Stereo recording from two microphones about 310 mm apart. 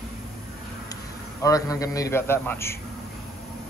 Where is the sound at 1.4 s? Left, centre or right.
Centre.